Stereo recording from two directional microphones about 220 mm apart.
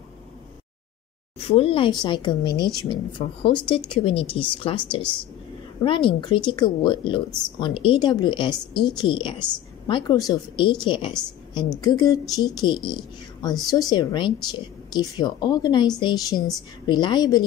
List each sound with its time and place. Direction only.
1.4 s a woman's voice: 25° left (ahead or behind)
7.2 s speech: 5° left (ahead or behind)
7.5 s a woman's voice: 25° left (ahead or behind)